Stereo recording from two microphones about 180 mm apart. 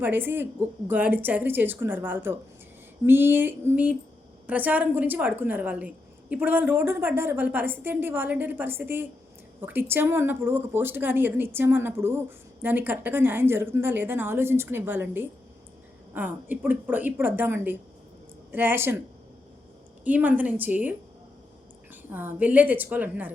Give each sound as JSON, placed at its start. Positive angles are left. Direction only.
{"t": 0.0, "sound": "a woman's voice", "side_deg": -10}
{"t": 20.1, "sound": "a woman's voice", "side_deg": -10}
{"t": 22.1, "sound": "a woman's voice", "side_deg": -10}